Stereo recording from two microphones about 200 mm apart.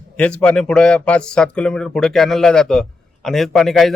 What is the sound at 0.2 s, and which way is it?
Speech, 5° left (ahead or behind).